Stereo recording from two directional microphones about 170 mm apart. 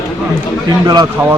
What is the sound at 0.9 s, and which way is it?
Speech, 25° right (ahead or behind).